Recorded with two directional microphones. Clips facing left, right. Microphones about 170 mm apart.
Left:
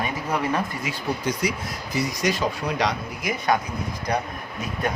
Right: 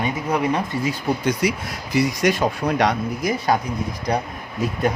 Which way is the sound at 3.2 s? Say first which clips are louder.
Right 2 dB; 30° right (ahead or behind).